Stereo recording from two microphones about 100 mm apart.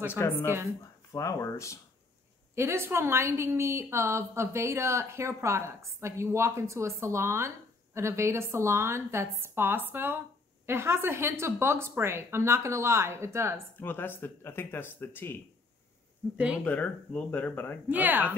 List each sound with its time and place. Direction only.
0.1 s speech: 20° left (ahead or behind)
1.1 s speech: 30° left (ahead or behind)
2.5 s a woman's voice: 25° right (ahead or behind)
13.7 s speech: 20° left (ahead or behind)
16.6 s speech: 15° left (ahead or behind)
17.8 s speech: 15° right (ahead or behind)